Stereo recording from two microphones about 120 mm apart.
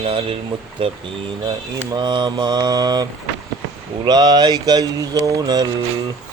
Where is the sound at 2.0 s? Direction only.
40° right (ahead or behind).